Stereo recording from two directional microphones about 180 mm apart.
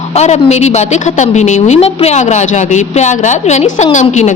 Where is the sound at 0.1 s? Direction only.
40° left (ahead or behind).